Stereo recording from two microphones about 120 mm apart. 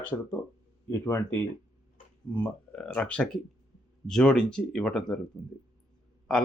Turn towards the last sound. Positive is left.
turn(degrees=5)  # may be behind; listen again after turning